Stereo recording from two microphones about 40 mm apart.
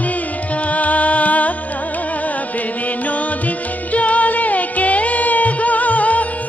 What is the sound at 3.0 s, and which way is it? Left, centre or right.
Music, left.